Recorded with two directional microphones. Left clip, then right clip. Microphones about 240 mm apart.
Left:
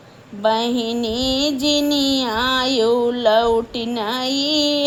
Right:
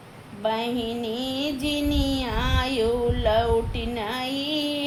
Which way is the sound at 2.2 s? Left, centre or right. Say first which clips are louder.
Left 8 dB; left.